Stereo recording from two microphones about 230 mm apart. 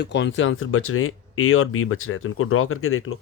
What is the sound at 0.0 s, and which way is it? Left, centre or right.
Speech, left.